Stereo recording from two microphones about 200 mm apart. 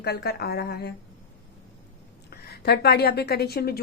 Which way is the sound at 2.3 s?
55° left (ahead or behind).